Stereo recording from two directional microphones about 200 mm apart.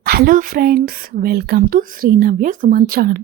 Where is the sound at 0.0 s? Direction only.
50° right (ahead or behind).